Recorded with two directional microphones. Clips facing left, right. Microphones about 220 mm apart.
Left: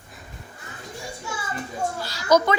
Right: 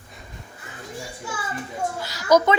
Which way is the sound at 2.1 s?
15° right (ahead or behind).